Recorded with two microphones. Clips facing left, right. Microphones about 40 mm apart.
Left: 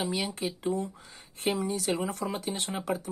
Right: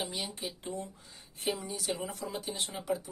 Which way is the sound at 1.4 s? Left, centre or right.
Left.